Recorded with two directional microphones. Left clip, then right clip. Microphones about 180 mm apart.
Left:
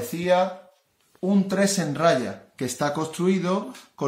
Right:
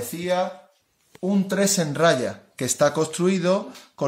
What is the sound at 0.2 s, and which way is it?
Speech, 5° left (ahead or behind).